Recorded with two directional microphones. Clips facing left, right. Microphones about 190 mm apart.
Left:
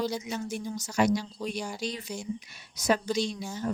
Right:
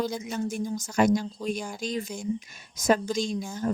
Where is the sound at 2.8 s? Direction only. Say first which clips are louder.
Right 2 dB; 45° right (ahead or behind).